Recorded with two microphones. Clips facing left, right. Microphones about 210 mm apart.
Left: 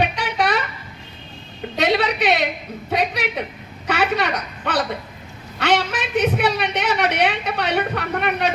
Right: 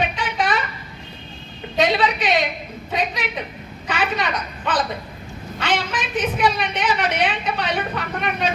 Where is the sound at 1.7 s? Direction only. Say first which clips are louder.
Even; 65° left (ahead or behind).